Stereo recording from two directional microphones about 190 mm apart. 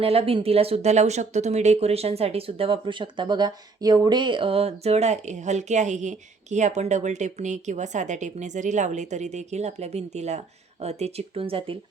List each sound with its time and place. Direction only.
0.0 s speech: 30° right (ahead or behind)